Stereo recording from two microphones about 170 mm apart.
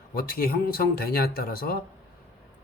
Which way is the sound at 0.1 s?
60° left (ahead or behind).